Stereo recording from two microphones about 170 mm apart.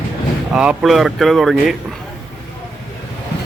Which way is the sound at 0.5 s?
5° right (ahead or behind).